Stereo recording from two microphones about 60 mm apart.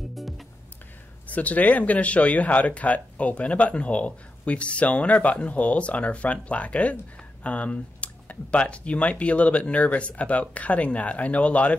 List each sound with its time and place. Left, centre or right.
1.2 s speech: left